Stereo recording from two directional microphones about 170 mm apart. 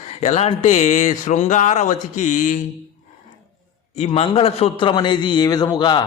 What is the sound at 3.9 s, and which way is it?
A man's voice, 35° left (ahead or behind).